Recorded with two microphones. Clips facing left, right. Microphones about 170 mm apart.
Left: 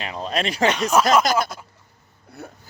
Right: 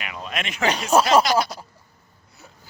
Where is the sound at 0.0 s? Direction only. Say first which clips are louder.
Left 6 dB; 30° left (ahead or behind).